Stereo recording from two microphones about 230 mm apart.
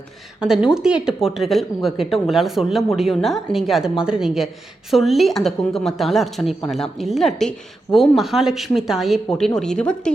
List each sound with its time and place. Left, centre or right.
0.4 s speech: centre